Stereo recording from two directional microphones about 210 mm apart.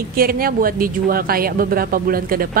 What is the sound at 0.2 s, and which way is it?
Speech, 45° right (ahead or behind).